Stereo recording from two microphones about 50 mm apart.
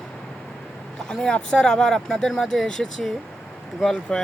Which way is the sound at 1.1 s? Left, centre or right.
Centre.